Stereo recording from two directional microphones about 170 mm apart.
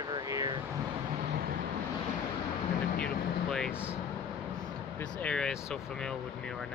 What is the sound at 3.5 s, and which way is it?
Speech, 5° left (ahead or behind).